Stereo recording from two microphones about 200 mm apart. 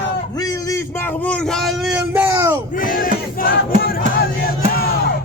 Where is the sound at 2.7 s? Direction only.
45° left (ahead or behind).